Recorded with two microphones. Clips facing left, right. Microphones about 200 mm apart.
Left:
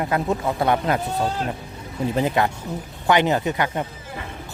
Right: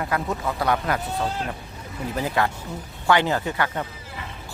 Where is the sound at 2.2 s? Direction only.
20° left (ahead or behind).